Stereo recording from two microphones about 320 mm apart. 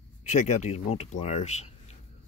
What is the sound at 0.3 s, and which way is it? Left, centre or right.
Speech, left.